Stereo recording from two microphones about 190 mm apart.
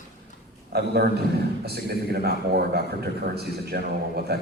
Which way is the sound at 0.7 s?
60° right (ahead or behind).